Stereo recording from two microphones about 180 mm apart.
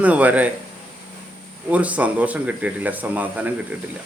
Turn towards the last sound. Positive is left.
turn(degrees=-10)  # may be behind; listen again after turning